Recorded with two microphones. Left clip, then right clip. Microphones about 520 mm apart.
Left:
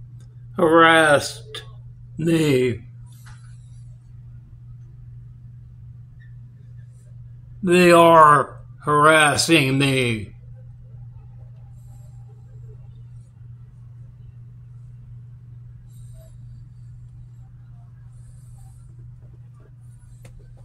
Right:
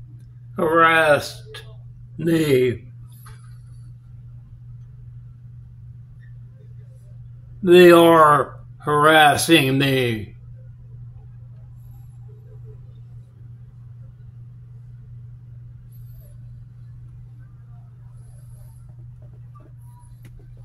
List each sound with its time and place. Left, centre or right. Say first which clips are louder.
0.6 s speech: left 2 dB; right
7.6 s speech: right 2 dB; right